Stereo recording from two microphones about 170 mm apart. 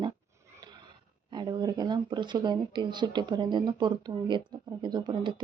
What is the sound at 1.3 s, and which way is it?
Speech, 25° right (ahead or behind).